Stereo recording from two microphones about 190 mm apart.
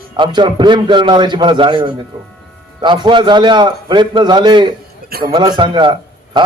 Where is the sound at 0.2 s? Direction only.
25° right (ahead or behind).